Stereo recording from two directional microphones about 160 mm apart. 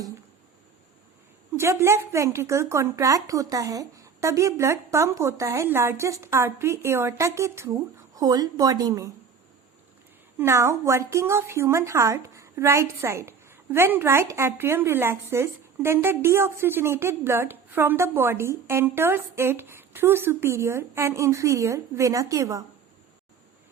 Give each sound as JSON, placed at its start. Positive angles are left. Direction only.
{"t": 1.5, "sound": "a woman's voice", "side_deg": -15}
{"t": 10.3, "sound": "a woman's voice", "side_deg": -15}